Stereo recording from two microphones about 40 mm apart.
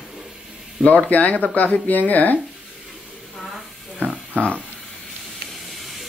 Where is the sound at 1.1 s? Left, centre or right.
Left.